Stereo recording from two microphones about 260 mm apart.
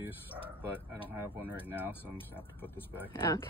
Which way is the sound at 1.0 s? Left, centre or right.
Centre.